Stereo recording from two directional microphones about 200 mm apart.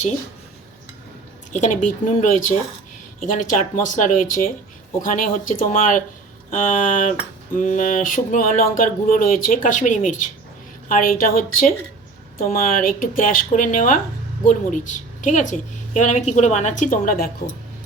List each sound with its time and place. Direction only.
1.5 s a woman's voice: 40° left (ahead or behind)